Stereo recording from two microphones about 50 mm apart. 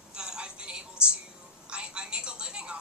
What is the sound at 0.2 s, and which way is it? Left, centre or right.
Music, centre.